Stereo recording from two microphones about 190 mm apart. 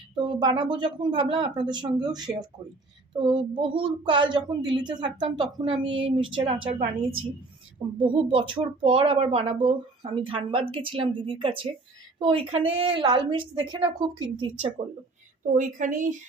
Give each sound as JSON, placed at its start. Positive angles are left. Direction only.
{"t": 0.1, "sound": "a woman's voice", "side_deg": -25}
{"t": 15.5, "sound": "a woman's voice", "side_deg": -45}